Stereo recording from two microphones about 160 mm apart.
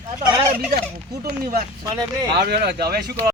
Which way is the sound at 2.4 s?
85° right.